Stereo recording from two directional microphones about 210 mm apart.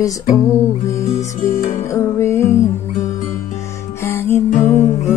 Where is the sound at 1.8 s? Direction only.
15° left (ahead or behind).